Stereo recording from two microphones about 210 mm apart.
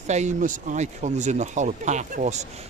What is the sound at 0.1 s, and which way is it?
Speech, 35° right (ahead or behind).